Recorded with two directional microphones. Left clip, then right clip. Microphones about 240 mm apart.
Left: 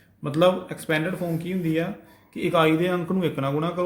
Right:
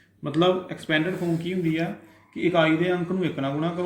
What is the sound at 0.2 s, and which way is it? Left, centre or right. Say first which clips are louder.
Speech: left 2 dB; left.